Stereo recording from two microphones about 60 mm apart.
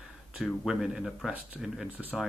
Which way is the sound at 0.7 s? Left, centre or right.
Centre.